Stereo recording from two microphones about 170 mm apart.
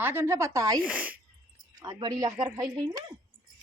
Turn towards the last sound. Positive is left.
turn(degrees=-20)  # may be behind; listen again after turning